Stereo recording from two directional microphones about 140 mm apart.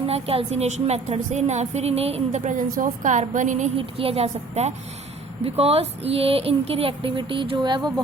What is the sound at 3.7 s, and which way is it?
A woman's voice, 45° right (ahead or behind).